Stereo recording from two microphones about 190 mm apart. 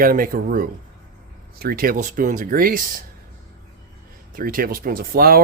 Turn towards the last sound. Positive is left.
turn(degrees=-50)  # may be behind; listen again after turning